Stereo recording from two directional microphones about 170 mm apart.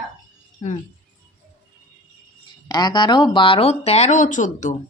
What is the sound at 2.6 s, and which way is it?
Speech, 25° left (ahead or behind).